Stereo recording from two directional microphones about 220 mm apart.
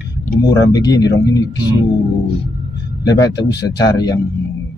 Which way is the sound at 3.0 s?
20° left (ahead or behind).